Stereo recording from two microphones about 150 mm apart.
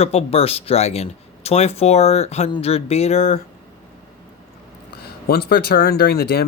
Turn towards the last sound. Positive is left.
turn(degrees=90)